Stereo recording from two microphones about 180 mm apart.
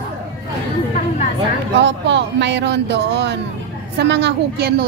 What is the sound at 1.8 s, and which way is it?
A woman's voice, 80° right.